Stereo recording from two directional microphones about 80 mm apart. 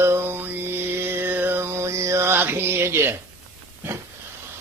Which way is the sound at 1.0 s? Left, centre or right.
Right.